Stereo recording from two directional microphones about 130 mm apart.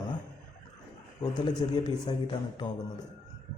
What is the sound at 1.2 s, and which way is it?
Speech, 35° left (ahead or behind).